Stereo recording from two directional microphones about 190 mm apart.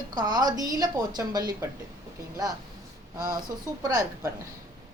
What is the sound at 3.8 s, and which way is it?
Speech, 20° right (ahead or behind).